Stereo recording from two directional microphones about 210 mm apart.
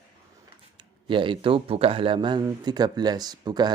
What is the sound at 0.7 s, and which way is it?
Speech, 25° right (ahead or behind).